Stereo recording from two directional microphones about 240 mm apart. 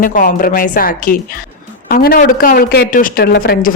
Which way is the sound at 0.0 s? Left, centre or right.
Left.